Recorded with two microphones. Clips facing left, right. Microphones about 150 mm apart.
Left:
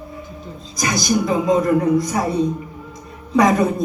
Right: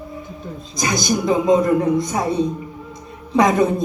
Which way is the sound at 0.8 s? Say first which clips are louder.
Left 1 dB; 25° right (ahead or behind).